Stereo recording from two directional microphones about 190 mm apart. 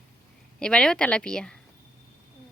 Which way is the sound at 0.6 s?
5° left (ahead or behind).